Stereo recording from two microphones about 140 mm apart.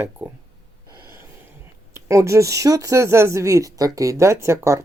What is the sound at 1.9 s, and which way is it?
Speech, 20° right (ahead or behind).